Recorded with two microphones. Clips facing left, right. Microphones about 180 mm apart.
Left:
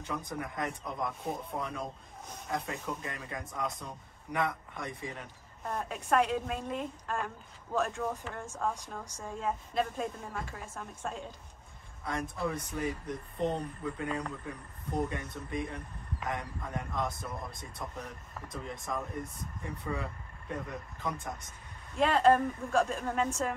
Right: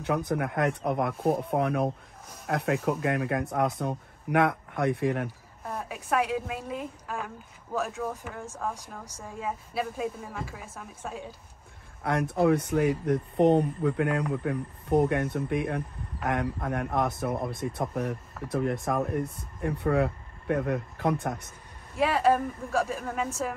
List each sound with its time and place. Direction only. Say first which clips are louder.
0.0 s speech: right 10 dB; 70° right (ahead or behind)
5.6 s a woman's voice: right 1 dB; 5° right (ahead or behind)
12.0 s speech: right 10 dB; 65° right (ahead or behind)
21.9 s a woman's voice: right 1 dB; 5° right (ahead or behind)